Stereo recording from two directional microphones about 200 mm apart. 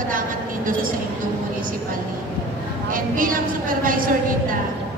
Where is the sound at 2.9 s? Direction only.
45° right (ahead or behind).